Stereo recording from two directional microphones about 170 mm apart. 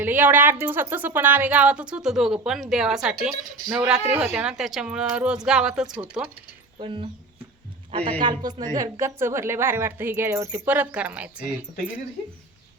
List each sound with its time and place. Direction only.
0.0 s a woman's voice: 10° right (ahead or behind)
6.7 s a man's voice: 30° right (ahead or behind)
8.2 s a woman's voice: 25° right (ahead or behind); by 11.4 s 5° right (ahead or behind)